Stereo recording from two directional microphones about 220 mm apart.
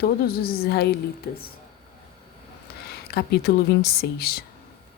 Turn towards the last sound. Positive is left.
turn(degrees=45)  # may be behind; listen again after turning